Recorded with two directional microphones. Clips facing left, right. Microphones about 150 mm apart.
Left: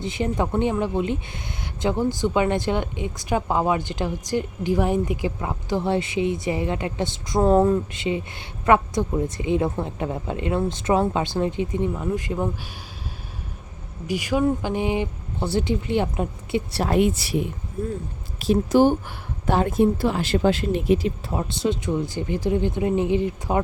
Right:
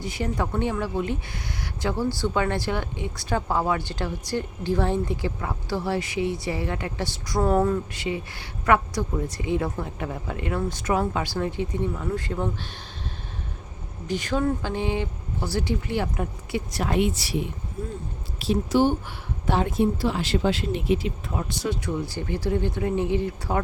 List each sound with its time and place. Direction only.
0.0 s a woman's voice: 20° left (ahead or behind)
14.1 s a woman's voice: 10° left (ahead or behind)
16.8 s a woman's voice: 50° left (ahead or behind); by 23.6 s 20° left (ahead or behind)